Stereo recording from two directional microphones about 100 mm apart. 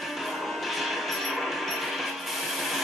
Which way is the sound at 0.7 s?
Centre (ahead or behind).